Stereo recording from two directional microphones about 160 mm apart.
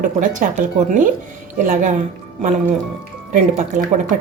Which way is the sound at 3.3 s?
50° right (ahead or behind).